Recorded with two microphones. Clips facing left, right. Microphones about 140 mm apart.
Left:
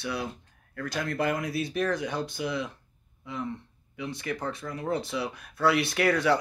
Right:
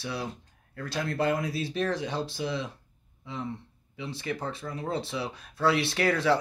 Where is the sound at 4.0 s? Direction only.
30° right (ahead or behind).